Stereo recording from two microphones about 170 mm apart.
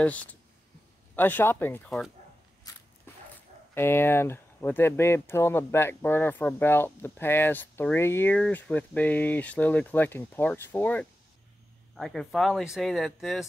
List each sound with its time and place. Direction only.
0.0 s speech: 10° left (ahead or behind)
2.7 s a sound: 20° left (ahead or behind)
3.7 s speech: 15° left (ahead or behind)